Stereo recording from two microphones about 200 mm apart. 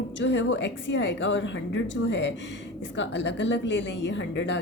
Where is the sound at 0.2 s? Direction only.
65° left (ahead or behind).